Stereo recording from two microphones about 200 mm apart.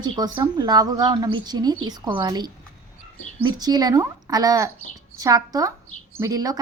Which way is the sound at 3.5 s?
20° right (ahead or behind).